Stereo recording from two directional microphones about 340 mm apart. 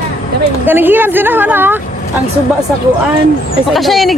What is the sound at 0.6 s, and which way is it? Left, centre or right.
A woman's voice, centre.